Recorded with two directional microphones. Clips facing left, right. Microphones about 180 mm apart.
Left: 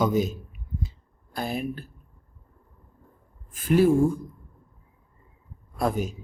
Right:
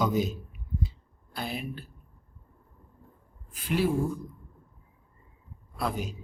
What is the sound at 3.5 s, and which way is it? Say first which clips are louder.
Speech: left 8 dB; 45° left (ahead or behind).